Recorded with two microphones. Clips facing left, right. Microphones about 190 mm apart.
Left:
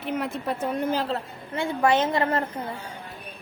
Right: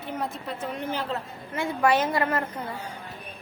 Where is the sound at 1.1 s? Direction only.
30° left (ahead or behind).